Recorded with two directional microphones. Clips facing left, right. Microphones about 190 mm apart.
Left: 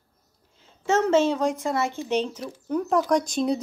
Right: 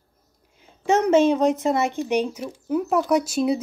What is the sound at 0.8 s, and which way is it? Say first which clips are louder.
Speech: right 3 dB; 15° right (ahead or behind).